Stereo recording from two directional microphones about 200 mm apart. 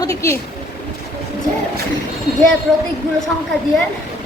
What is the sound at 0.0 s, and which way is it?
Speech, 15° left (ahead or behind).